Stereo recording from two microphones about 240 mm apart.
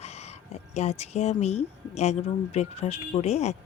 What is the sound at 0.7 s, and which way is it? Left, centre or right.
Speech, left.